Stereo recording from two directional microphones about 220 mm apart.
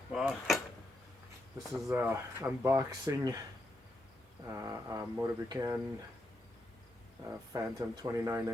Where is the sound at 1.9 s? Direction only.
10° right (ahead or behind).